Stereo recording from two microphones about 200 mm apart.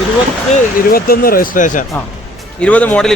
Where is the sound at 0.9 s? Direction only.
45° left (ahead or behind).